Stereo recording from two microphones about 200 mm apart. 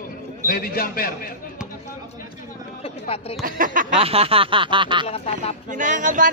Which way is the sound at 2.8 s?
30° left (ahead or behind).